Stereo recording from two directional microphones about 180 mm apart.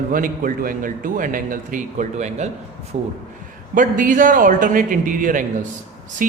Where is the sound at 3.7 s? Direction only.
50° right (ahead or behind).